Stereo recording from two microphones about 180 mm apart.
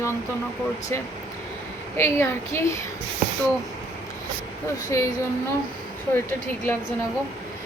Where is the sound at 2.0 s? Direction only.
15° left (ahead or behind).